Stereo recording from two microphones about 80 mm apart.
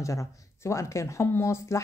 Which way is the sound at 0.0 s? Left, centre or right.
Left.